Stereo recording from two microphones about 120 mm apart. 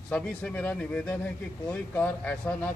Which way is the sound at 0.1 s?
10° left (ahead or behind).